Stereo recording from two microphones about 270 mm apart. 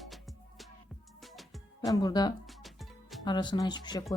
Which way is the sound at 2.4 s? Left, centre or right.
Centre.